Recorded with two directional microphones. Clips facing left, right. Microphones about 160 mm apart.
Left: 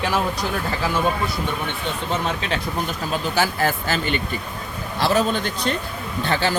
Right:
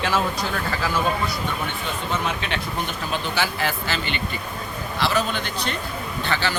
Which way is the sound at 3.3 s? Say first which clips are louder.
Left 6 dB; 45° left (ahead or behind).